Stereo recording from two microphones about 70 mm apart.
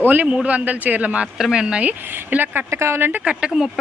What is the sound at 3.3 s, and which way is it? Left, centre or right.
Speech, centre.